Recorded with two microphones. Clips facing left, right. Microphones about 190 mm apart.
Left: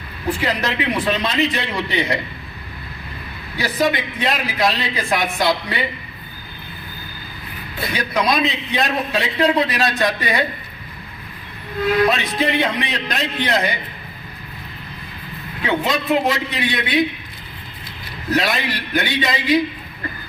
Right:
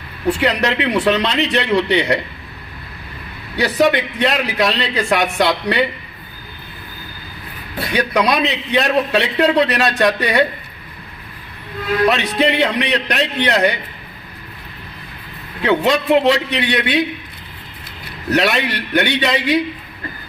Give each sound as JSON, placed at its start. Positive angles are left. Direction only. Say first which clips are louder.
{"t": 0.3, "sound": "a man's voice", "louder": "right 5 dB", "side_deg": -70}
{"t": 3.6, "sound": "a man's voice", "louder": "right 5 dB", "side_deg": -70}
{"t": 7.9, "sound": "a man's voice", "louder": "right 3 dB", "side_deg": -70}
{"t": 12.0, "sound": "a man's voice", "louder": "right 3 dB", "side_deg": -70}
{"t": 15.6, "sound": "a man's voice", "louder": "right 5 dB", "side_deg": -70}
{"t": 18.3, "sound": "a man's voice", "louder": "right 3 dB", "side_deg": -70}